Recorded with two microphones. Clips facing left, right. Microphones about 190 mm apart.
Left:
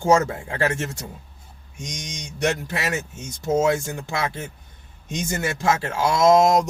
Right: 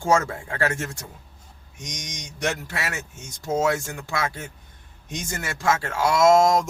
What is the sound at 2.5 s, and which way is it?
Speech, 20° left (ahead or behind).